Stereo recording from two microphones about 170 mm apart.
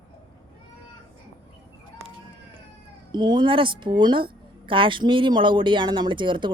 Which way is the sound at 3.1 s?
25° right (ahead or behind).